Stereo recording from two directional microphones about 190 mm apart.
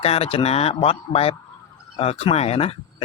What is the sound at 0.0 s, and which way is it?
Speech, 30° left (ahead or behind).